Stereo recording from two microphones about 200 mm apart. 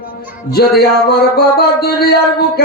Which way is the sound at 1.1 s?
50° left (ahead or behind).